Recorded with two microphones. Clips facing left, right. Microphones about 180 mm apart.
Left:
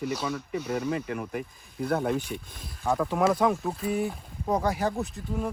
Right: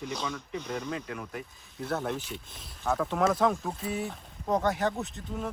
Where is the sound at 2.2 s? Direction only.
50° left (ahead or behind).